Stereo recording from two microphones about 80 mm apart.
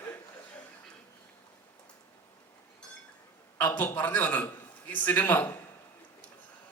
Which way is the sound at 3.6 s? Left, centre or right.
Left.